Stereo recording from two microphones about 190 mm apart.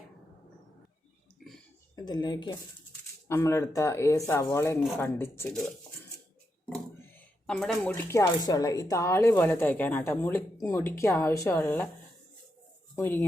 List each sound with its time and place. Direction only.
2.0 s a woman's voice: 20° left (ahead or behind); by 5.7 s 5° left (ahead or behind)
7.4 s speech: 5° left (ahead or behind)
13.0 s speech: 10° left (ahead or behind)